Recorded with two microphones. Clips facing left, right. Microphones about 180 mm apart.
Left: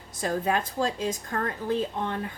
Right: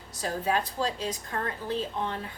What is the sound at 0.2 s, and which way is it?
A woman's voice, 50° left (ahead or behind).